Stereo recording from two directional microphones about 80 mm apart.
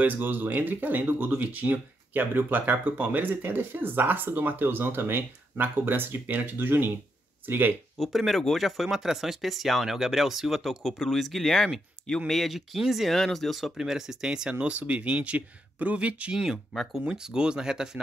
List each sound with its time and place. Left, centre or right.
0.0 s speech: right
8.0 s speech: centre
16.7 s speech: centre
17.0 s speech: centre